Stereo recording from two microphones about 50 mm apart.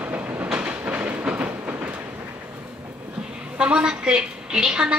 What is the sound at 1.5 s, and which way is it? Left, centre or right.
Train, right.